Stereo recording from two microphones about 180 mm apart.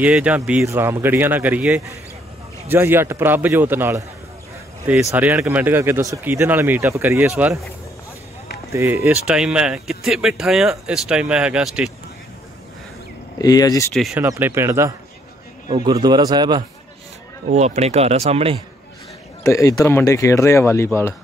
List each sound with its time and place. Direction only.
0.0 s a man's voice: 5° right (ahead or behind)
5.1 s a man's voice: 10° right (ahead or behind)
8.7 s speech: 15° right (ahead or behind)
13.4 s speech: 20° left (ahead or behind)
13.9 s speech: centre (ahead or behind)
14.2 s a man's voice: 15° right (ahead or behind)
17.5 s speech: 40° right (ahead or behind)
19.4 s speech: 15° left (ahead or behind)